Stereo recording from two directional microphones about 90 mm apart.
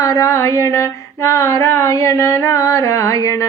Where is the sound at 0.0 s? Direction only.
40° left (ahead or behind).